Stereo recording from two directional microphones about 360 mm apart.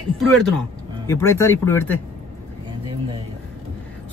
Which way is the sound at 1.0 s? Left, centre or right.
Centre.